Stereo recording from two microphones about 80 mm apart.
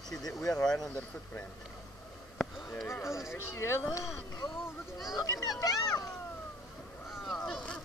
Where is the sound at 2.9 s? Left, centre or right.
Left.